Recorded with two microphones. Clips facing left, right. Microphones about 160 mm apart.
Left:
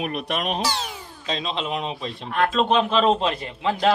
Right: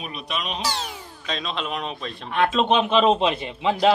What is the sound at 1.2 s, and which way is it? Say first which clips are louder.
Speech: left 2 dB; 25° left (ahead or behind).